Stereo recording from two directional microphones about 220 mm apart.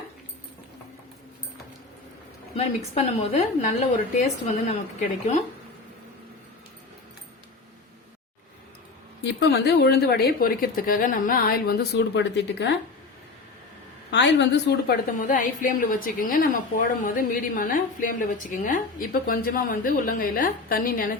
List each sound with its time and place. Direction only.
2.6 s a woman's voice: 30° left (ahead or behind)
9.2 s speech: 50° left (ahead or behind)
14.1 s speech: 50° left (ahead or behind)
15.2 s a woman's voice: 35° left (ahead or behind)